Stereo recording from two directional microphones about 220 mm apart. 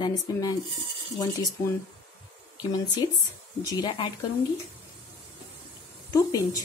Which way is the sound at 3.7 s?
20° left (ahead or behind).